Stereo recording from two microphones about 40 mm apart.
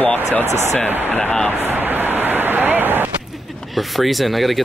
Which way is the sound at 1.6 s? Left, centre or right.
Right.